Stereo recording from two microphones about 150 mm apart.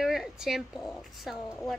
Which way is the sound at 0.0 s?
5° right (ahead or behind).